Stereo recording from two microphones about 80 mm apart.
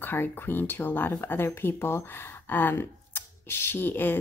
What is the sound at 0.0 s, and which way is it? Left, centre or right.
Speech, left.